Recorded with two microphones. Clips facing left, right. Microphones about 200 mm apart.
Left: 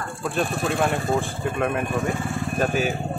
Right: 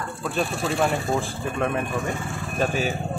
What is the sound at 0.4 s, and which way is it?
Speech, centre (ahead or behind).